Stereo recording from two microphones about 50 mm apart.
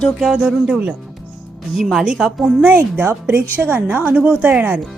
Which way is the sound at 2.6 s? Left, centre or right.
Right.